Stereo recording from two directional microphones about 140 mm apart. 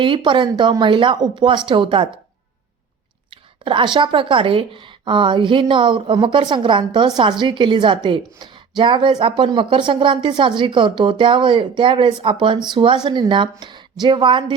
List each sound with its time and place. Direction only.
0.0 s a woman's voice: 35° right (ahead or behind)
3.2 s a woman's voice: 35° right (ahead or behind)